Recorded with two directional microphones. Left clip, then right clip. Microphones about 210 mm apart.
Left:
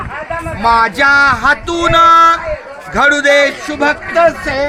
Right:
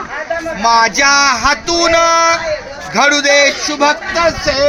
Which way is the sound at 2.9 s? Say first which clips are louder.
Left 1 dB; 35° right (ahead or behind).